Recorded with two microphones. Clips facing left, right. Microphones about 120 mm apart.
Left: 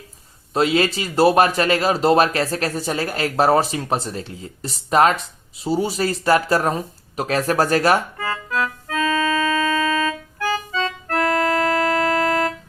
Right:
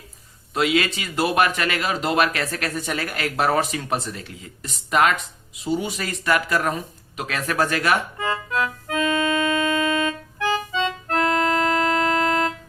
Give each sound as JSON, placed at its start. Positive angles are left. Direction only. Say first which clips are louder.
{"t": 0.5, "sound": "speech", "louder": "left 3 dB", "side_deg": 35}
{"t": 8.2, "sound": "organ", "louder": "even", "side_deg": -25}
{"t": 11.1, "sound": "music", "louder": "left 2 dB", "side_deg": -25}